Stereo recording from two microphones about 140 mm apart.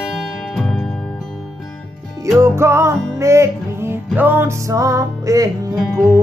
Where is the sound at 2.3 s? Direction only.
20° right (ahead or behind).